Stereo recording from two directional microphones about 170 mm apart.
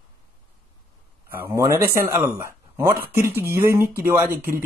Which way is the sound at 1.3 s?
15° right (ahead or behind).